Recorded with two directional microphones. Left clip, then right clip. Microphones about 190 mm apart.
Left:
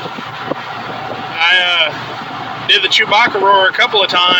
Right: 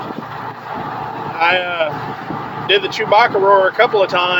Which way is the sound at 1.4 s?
15° right (ahead or behind).